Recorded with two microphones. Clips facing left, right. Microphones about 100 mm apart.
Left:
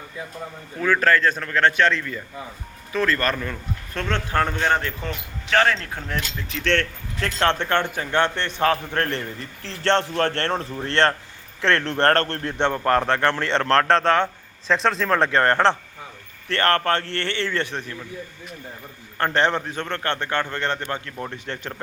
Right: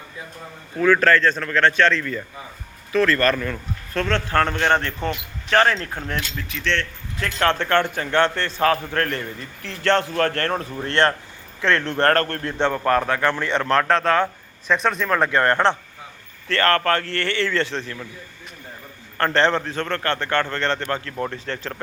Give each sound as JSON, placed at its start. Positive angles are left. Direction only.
{"t": 0.8, "sound": "a man's voice", "side_deg": 10}
{"t": 6.5, "sound": "speech", "side_deg": 45}
{"t": 7.2, "sound": "speech", "side_deg": 35}
{"t": 7.4, "sound": "a man's voice", "side_deg": 20}
{"t": 13.6, "sound": "speech", "side_deg": -10}
{"t": 13.8, "sound": "speech", "side_deg": 30}
{"t": 19.1, "sound": "a man's voice", "side_deg": 15}